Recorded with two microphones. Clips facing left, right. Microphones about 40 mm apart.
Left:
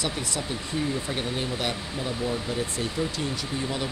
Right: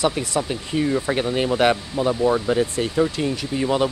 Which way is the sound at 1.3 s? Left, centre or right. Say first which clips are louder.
Right 11 dB; right.